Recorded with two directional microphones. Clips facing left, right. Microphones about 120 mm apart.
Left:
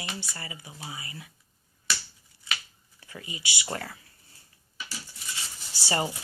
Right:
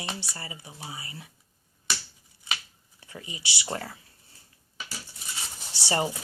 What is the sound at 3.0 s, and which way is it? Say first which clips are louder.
Speech: even; 25° right (ahead or behind).